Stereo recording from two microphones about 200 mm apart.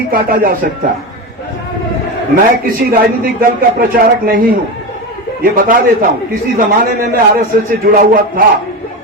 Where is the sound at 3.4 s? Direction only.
45° right (ahead or behind).